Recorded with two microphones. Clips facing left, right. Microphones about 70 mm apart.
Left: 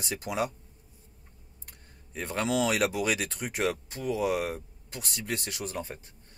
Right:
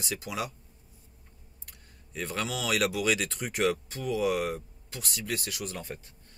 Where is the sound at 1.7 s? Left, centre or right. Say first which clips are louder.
Even; left.